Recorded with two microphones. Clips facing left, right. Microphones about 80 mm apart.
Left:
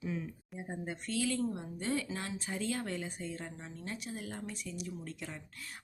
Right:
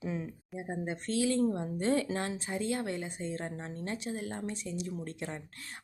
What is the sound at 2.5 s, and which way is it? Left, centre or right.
Speech, right.